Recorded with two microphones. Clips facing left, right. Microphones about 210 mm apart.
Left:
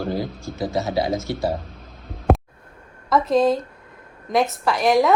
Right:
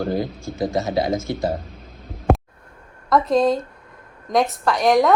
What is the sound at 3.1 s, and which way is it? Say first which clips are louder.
Speech: even; centre (ahead or behind).